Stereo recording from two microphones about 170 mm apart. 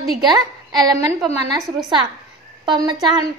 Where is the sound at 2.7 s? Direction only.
20° right (ahead or behind).